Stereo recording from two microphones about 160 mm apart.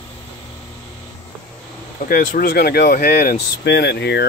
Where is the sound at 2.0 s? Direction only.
60° left (ahead or behind); by 4.3 s 90° left.